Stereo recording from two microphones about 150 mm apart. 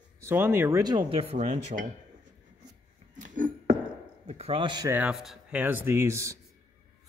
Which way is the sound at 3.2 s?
60° right (ahead or behind).